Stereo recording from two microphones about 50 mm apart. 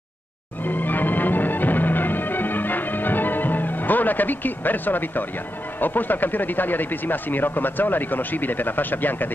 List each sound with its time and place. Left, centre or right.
0.7 s music: left
5.8 s speech: left